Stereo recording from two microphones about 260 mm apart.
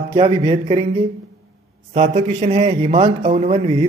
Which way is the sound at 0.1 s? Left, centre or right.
Right.